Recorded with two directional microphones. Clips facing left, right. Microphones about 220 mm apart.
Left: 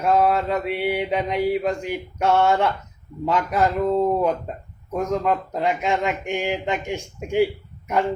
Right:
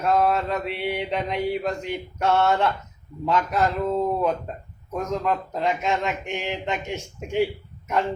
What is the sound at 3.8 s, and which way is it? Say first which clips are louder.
A man's voice: left 3 dB; 5° left (ahead or behind).